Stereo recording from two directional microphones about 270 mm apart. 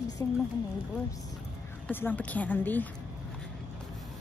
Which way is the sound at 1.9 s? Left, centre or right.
Centre.